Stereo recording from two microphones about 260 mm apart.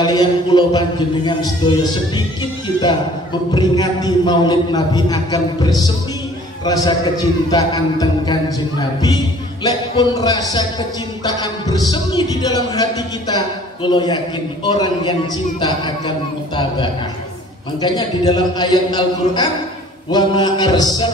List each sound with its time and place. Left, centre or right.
0.0 s music: centre
3.5 s music: centre
13.8 s music: centre